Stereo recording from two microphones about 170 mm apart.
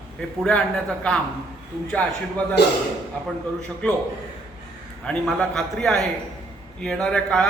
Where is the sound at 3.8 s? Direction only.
5° left (ahead or behind).